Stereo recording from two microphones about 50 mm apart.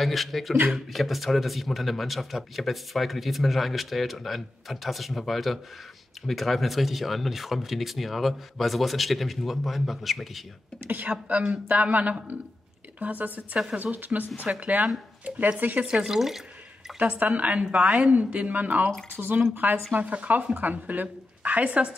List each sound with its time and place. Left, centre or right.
0.0 s speech: centre
11.1 s a woman's voice: right
15.8 s speech: centre
17.0 s a woman's voice: right
19.9 s a woman's voice: right